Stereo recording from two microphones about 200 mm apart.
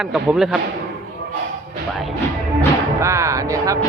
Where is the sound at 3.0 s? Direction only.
15° right (ahead or behind).